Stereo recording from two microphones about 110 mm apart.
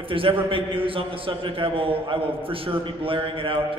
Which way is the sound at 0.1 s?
55° right (ahead or behind).